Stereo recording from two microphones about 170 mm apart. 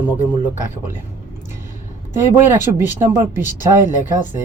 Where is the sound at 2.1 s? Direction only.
15° right (ahead or behind).